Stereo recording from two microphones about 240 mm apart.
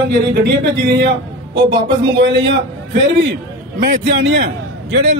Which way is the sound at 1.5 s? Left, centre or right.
Centre.